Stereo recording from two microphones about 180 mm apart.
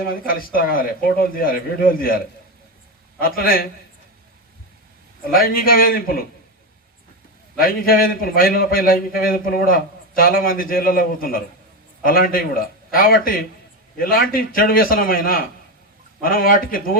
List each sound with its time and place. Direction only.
0.0 s a man's voice: 55° left (ahead or behind)
3.2 s a man's voice: 55° left (ahead or behind)
5.2 s a man's voice: 55° left (ahead or behind)
7.6 s a man's voice: 55° left (ahead or behind)